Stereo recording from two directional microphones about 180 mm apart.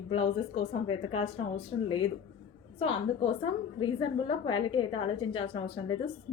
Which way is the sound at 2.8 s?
30° left (ahead or behind).